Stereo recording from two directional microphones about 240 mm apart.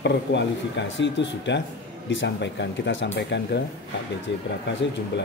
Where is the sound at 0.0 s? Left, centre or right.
Left.